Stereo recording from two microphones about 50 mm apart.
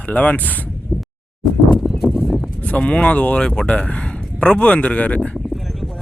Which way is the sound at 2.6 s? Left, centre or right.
Left.